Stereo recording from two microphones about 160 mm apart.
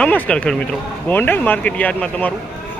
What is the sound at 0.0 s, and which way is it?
Speech, 10° left (ahead or behind).